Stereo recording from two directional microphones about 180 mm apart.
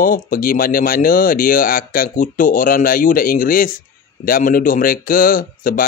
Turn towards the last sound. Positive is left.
turn(degrees=50)  # may be behind; listen again after turning